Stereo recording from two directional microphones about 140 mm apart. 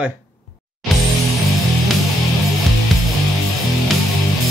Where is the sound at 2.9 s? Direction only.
Centre (ahead or behind).